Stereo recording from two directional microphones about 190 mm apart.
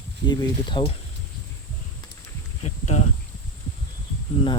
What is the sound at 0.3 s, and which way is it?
Speech, 25° left (ahead or behind).